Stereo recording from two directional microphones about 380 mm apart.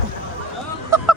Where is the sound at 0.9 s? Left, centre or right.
Centre.